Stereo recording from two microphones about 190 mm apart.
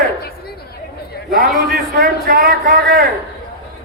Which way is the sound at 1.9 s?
50° right (ahead or behind).